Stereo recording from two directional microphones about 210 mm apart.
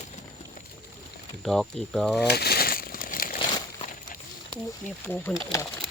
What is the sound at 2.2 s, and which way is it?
Crumpling, 50° left (ahead or behind).